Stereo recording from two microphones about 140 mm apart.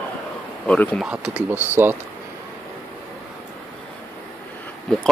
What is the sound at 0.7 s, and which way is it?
Speech, 10° left (ahead or behind).